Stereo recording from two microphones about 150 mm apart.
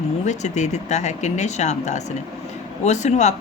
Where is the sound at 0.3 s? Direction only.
50° left (ahead or behind).